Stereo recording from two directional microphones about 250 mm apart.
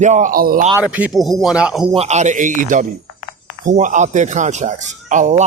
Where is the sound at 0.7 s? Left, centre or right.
Centre.